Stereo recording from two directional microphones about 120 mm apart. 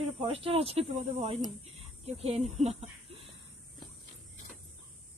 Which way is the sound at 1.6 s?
60° right (ahead or behind).